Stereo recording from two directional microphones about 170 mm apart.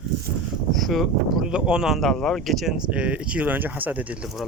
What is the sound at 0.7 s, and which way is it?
Speech, centre (ahead or behind).